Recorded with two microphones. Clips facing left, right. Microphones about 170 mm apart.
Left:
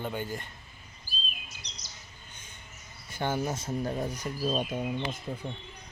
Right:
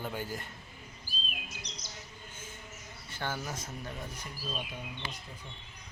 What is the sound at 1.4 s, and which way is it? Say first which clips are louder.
Chirp: right 4 dB; 50° right (ahead or behind).